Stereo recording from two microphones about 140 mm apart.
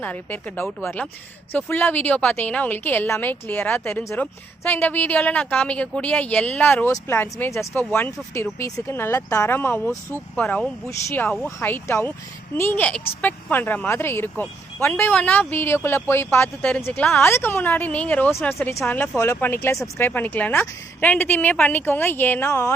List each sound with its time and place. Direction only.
0.0 s speech: 10° left (ahead or behind)
10.3 s speech: 5° left (ahead or behind)
17.2 s speech: 15° left (ahead or behind)